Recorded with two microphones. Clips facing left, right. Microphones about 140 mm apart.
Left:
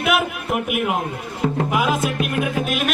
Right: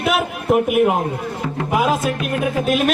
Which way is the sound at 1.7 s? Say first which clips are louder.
Right 2 dB; 35° right (ahead or behind).